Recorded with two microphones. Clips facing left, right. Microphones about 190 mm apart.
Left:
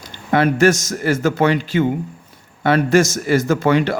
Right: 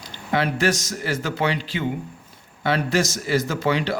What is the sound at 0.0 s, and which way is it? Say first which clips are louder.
Speech: left 7 dB; 50° left (ahead or behind).